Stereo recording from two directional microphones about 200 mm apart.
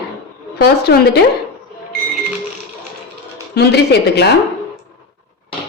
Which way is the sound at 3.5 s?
55° left (ahead or behind).